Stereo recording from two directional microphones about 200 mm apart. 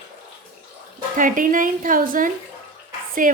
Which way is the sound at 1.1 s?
40° right (ahead or behind).